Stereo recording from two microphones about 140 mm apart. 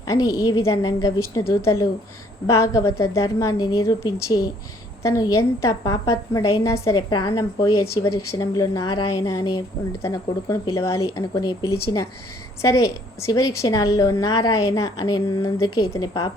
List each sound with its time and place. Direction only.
0.1 s a woman's voice: 25° left (ahead or behind)